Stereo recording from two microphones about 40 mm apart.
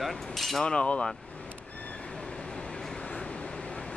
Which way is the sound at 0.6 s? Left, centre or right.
Left.